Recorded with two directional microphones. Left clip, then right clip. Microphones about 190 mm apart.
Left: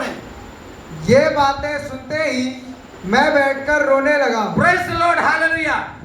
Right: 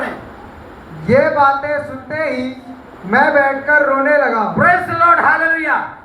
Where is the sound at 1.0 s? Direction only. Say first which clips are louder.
Right 2 dB; 50° left (ahead or behind).